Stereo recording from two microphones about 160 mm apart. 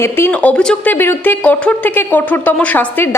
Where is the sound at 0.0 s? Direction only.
10° left (ahead or behind).